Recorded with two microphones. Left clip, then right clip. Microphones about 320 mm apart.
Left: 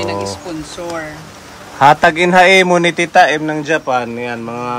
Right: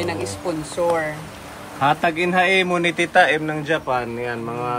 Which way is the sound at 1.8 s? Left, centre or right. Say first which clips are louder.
Left 10 dB; left.